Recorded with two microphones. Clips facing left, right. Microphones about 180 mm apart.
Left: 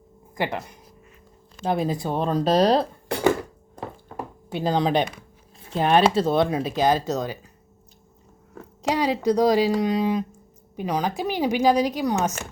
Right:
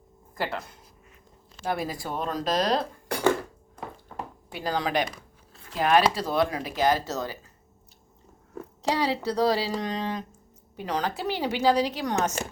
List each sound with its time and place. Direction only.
0.3 s speech: 15° left (ahead or behind); by 3.2 s 30° left (ahead or behind)
4.5 s speech: 25° left (ahead or behind)
8.8 s a woman's voice: 15° left (ahead or behind)